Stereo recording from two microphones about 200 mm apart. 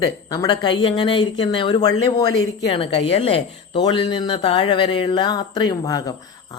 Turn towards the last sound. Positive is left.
turn(degrees=20)  # may be behind; listen again after turning